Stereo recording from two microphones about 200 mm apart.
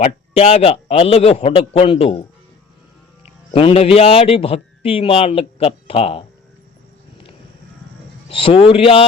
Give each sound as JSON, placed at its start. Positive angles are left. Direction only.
{"t": 0.0, "sound": "a man's voice", "side_deg": 30}
{"t": 3.6, "sound": "a man's voice", "side_deg": 30}
{"t": 8.3, "sound": "a man's voice", "side_deg": 25}